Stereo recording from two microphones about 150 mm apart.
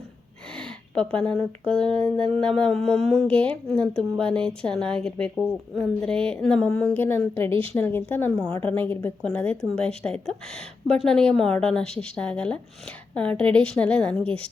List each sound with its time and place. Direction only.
1.1 s a woman's voice: 5° left (ahead or behind)
3.0 s speech: 45° right (ahead or behind)
3.2 s a woman's voice: 10° left (ahead or behind)
7.5 s speech: 35° right (ahead or behind)
7.8 s a woman's voice: 15° left (ahead or behind)